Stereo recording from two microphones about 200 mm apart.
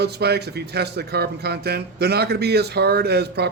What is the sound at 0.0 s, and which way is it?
Speech, 55° right (ahead or behind).